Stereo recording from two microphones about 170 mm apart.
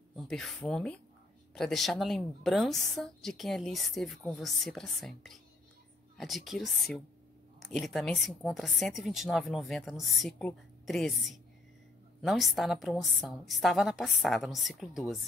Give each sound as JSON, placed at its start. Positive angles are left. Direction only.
{"t": 0.1, "sound": "a woman's voice", "side_deg": 0}